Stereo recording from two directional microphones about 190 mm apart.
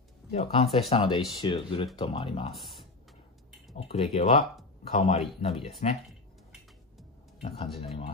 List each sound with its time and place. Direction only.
0.3 s speech: 30° left (ahead or behind)
3.7 s speech: 30° left (ahead or behind)
7.4 s speech: 30° left (ahead or behind)